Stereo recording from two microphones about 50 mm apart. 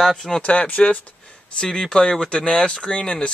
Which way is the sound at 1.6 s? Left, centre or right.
Centre.